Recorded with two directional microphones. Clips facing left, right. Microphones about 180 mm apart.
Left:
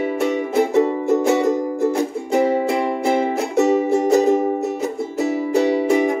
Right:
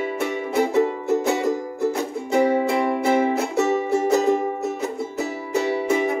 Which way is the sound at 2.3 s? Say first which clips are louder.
Left 1 dB; 15° left (ahead or behind).